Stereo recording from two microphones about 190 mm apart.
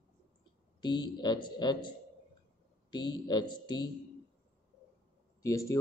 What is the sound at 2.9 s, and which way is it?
Speech, 25° left (ahead or behind).